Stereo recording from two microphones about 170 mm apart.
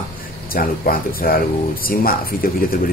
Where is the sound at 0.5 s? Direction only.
60° left (ahead or behind).